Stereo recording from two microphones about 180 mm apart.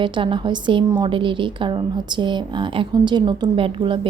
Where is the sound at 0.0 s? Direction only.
25° right (ahead or behind).